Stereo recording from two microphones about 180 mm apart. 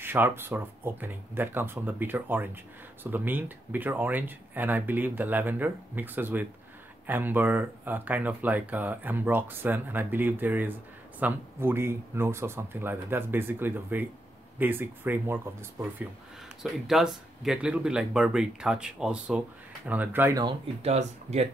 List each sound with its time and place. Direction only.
0.0 s speech: 10° right (ahead or behind)
16.6 s speech: centre (ahead or behind)
20.4 s speech: 35° right (ahead or behind)